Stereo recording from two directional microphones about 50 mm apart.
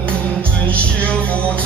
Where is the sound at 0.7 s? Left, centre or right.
Left.